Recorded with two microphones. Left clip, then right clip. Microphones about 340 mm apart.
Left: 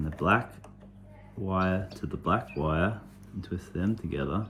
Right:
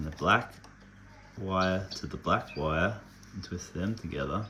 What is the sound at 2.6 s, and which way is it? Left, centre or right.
Speech, right.